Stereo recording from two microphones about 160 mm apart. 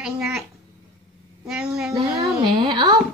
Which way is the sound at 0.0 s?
Centre (ahead or behind).